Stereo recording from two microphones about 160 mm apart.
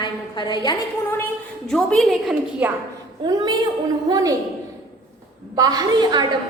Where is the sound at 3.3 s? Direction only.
25° right (ahead or behind).